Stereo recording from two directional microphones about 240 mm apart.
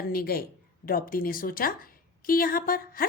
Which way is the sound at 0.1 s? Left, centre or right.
Left.